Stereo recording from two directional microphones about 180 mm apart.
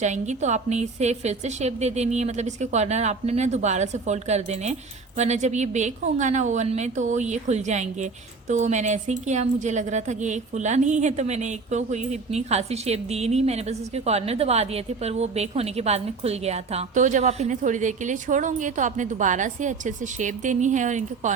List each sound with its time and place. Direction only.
0.0 s a woman's voice: 40° right (ahead or behind)